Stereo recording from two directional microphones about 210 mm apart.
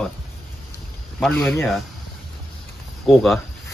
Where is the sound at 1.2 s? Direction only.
5° left (ahead or behind).